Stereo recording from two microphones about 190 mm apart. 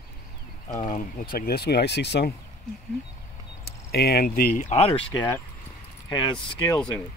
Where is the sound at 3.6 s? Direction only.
55° left (ahead or behind); by 6.7 s 25° left (ahead or behind).